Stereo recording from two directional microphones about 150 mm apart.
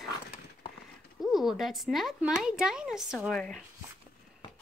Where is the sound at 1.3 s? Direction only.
Centre (ahead or behind).